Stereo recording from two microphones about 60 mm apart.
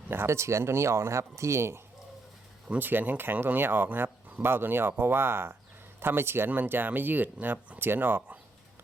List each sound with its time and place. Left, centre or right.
0.1 s speech: right
2.7 s speech: right